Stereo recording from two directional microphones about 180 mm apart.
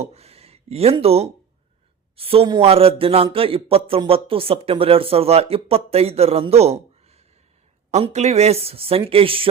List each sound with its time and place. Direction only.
0.0 s speech: 35° right (ahead or behind)